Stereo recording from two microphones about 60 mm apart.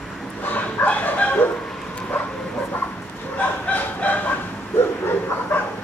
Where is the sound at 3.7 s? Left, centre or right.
Left.